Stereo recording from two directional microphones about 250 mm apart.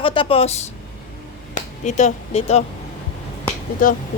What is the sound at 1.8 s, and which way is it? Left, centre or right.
Speech, left.